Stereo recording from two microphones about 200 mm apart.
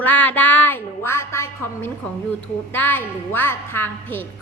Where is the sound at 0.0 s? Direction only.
10° left (ahead or behind).